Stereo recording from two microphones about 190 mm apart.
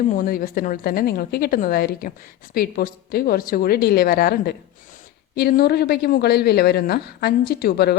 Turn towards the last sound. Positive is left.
turn(degrees=55)  # may be behind; listen again after turning